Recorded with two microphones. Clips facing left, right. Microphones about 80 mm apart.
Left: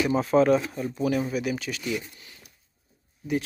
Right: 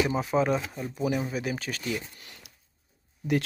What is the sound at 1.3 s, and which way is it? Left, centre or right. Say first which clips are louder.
Speech: left 3 dB; right.